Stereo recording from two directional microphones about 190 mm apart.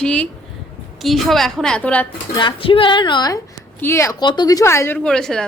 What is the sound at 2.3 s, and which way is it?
A woman's voice, 25° left (ahead or behind).